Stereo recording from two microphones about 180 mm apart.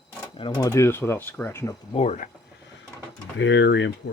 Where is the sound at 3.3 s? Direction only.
90° left.